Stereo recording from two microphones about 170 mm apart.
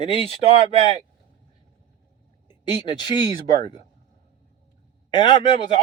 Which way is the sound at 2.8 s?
25° left (ahead or behind).